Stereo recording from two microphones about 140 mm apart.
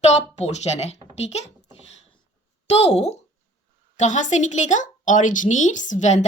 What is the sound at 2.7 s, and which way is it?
A woman's voice, 50° left (ahead or behind).